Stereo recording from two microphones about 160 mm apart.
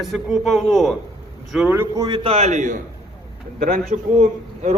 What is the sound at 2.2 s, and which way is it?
A man's voice, 40° right (ahead or behind).